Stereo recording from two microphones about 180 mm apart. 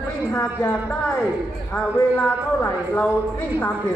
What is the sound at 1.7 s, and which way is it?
A man's voice, 5° left (ahead or behind).